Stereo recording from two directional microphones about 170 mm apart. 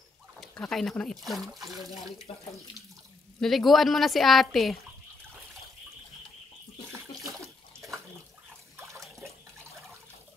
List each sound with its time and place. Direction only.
0.4 s speech: centre (ahead or behind)
2.3 s speech: 35° left (ahead or behind)
3.3 s speech: centre (ahead or behind)
7.2 s bathtub: centre (ahead or behind)